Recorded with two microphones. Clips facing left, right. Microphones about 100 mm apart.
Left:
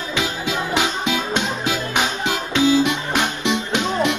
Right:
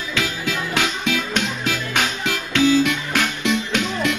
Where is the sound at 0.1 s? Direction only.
20° left (ahead or behind).